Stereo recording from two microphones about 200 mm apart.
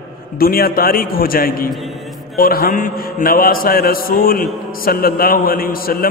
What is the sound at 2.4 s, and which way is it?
A man's voice, 45° left (ahead or behind).